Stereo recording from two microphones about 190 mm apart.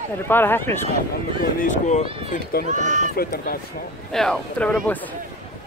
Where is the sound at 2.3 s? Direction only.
50° left (ahead or behind).